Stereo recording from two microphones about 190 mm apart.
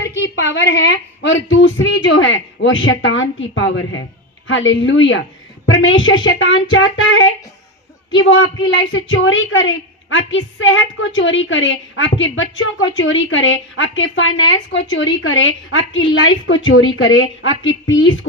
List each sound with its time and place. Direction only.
0.2 s a woman's voice: 70° left (ahead or behind)